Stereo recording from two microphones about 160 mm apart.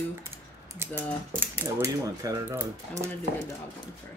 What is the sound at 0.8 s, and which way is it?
Speech, 15° right (ahead or behind).